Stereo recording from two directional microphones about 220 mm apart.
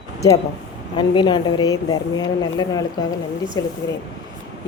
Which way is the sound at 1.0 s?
20° left (ahead or behind).